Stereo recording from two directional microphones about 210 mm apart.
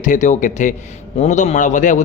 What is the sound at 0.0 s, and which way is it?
A man's voice, 35° left (ahead or behind).